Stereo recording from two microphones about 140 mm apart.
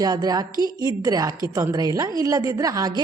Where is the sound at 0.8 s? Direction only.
25° right (ahead or behind).